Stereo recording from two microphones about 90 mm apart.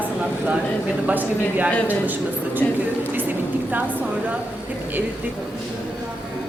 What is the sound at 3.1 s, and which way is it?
Vehicle, 20° right (ahead or behind).